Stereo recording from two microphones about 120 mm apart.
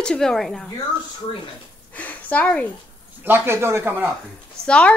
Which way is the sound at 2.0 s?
15° left (ahead or behind).